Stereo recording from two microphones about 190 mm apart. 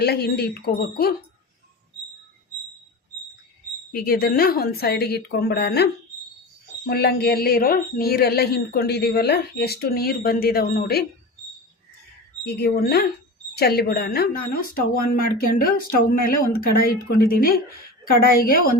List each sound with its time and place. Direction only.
0.0 s a man's voice: 55° left (ahead or behind)
3.9 s a man's voice: 50° left (ahead or behind)
12.5 s a man's voice: 60° left (ahead or behind)